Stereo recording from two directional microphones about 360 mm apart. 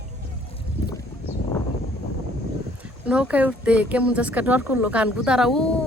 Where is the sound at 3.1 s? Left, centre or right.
Centre.